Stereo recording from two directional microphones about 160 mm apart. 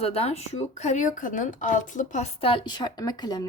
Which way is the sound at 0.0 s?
40° left (ahead or behind).